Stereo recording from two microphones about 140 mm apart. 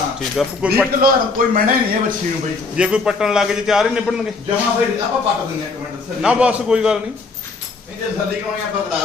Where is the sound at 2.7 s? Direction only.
5° right (ahead or behind).